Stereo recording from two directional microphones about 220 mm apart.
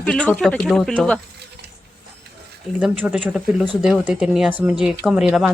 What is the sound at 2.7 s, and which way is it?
Speech, 5° right (ahead or behind).